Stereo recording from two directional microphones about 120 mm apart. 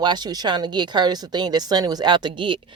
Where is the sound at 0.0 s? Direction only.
35° right (ahead or behind).